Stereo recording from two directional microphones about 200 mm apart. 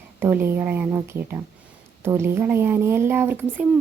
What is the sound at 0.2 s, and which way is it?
Speech, 10° right (ahead or behind).